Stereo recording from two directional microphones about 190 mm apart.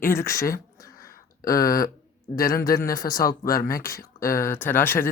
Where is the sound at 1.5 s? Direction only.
20° left (ahead or behind).